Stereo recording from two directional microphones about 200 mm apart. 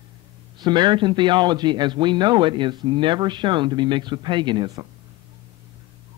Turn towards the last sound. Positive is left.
turn(degrees=-20)  # may be behind; listen again after turning